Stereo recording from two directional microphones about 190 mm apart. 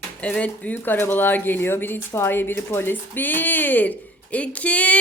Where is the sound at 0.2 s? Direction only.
5° left (ahead or behind).